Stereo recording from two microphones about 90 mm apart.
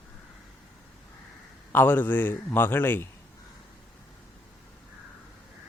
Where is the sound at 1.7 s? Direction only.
20° left (ahead or behind).